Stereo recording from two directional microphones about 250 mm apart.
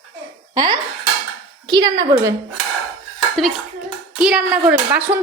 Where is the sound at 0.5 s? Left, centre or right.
Centre.